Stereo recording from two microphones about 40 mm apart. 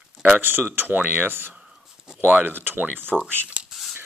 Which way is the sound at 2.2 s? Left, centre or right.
Right.